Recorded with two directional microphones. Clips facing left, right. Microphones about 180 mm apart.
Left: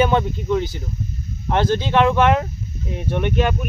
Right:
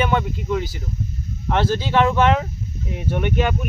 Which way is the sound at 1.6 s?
20° left (ahead or behind).